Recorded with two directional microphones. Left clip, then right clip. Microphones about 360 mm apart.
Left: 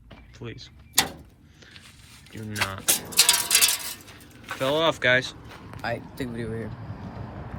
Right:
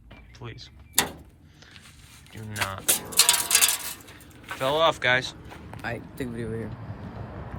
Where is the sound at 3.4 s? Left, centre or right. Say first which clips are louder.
Left 1 dB; centre.